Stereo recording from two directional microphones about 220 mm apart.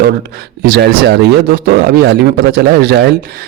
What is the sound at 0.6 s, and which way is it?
A man's voice, 45° right (ahead or behind).